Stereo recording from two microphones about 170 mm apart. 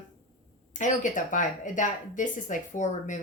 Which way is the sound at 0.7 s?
50° left (ahead or behind).